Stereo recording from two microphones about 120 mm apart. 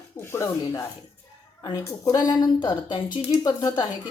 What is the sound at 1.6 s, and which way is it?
A woman's voice, 30° left (ahead or behind).